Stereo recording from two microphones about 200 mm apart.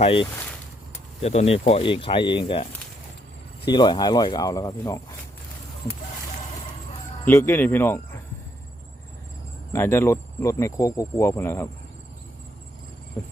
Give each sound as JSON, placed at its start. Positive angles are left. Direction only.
{"t": 0.0, "sound": "speech", "side_deg": 25}
{"t": 3.7, "sound": "speech", "side_deg": 20}
{"t": 7.3, "sound": "speech", "side_deg": 10}
{"t": 9.7, "sound": "speech", "side_deg": 10}